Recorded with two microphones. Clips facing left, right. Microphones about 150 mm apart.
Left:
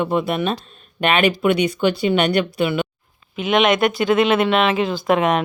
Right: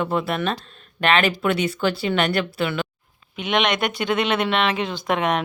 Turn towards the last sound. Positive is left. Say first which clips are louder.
# left 5 dB
turn(degrees=0)  # may be behind; listen again after turning